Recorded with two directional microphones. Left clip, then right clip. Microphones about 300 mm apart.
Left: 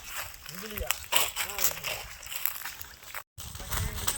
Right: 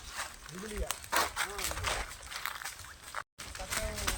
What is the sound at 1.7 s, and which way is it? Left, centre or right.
Crumpling, left.